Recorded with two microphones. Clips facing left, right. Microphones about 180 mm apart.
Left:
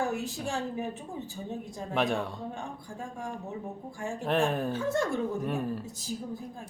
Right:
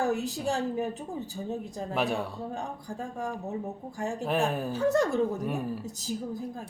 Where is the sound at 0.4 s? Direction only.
40° right (ahead or behind).